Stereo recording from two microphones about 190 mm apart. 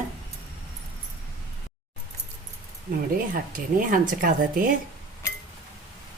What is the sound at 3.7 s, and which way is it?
Speech, 45° right (ahead or behind).